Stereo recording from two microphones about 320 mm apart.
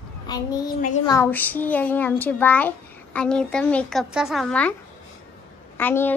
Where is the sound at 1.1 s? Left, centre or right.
Centre.